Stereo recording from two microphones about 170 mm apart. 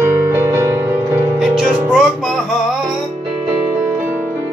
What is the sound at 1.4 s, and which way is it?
Music, centre (ahead or behind).